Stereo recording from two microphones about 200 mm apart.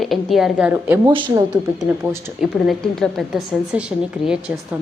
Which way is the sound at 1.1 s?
25° right (ahead or behind).